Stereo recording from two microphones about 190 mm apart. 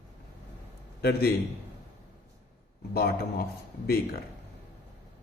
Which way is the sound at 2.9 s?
55° left (ahead or behind).